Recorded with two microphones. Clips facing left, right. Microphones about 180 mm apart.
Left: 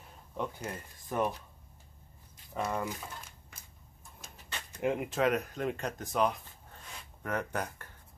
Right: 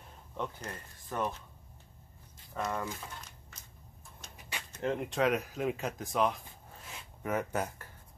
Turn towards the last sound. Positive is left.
turn(degrees=-5)  # may be behind; listen again after turning